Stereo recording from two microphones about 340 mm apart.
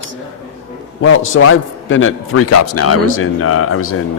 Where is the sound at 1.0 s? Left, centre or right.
Left.